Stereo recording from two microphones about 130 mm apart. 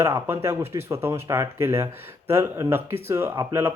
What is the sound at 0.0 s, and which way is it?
Speech, 20° right (ahead or behind).